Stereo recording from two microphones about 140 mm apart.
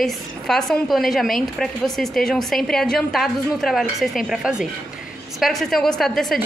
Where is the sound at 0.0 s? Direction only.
5° left (ahead or behind).